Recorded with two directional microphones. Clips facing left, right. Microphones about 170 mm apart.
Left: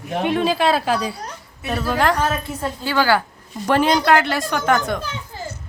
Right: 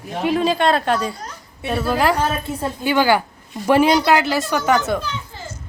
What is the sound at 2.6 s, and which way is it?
A woman's voice, 15° right (ahead or behind).